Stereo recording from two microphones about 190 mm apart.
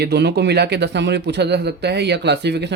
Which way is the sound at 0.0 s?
60° right (ahead or behind).